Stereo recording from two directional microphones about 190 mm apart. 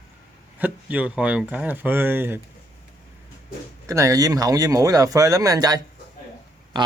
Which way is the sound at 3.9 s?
15° right (ahead or behind).